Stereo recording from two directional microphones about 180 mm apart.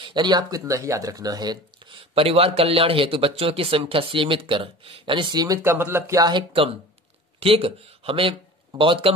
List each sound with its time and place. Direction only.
0.0 s speech: 25° right (ahead or behind)